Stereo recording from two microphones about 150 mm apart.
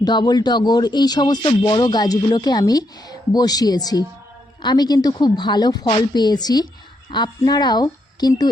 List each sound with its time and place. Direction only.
0.0 s speech: 30° left (ahead or behind)